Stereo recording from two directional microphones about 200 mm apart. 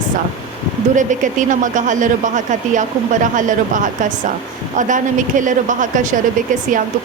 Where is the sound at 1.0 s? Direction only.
40° right (ahead or behind).